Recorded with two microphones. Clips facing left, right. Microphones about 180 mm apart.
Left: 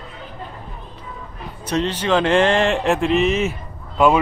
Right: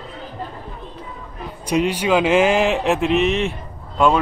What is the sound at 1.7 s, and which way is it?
A man's voice, 10° right (ahead or behind).